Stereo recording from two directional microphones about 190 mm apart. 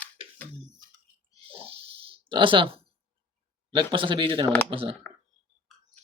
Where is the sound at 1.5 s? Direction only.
30° right (ahead or behind).